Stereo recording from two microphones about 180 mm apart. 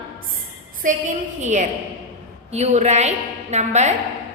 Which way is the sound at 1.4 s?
40° right (ahead or behind).